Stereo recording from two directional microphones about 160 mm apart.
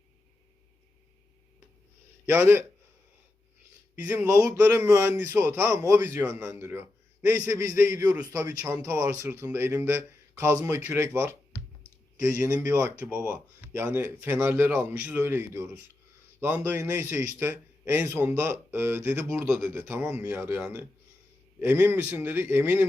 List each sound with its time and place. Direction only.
2.2 s speech: 15° right (ahead or behind)
3.9 s speech: 15° right (ahead or behind)